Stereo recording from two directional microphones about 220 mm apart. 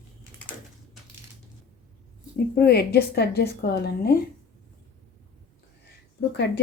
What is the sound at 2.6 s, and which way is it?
A woman's voice, 45° left (ahead or behind).